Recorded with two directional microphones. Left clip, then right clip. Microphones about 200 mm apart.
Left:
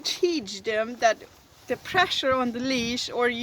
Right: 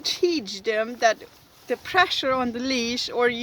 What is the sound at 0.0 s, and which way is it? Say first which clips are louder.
Speech: right 2 dB; 20° right (ahead or behind).